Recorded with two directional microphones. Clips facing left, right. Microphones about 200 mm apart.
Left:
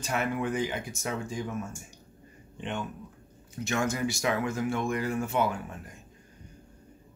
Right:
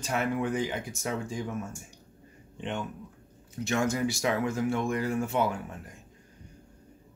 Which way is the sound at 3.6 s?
35° right (ahead or behind).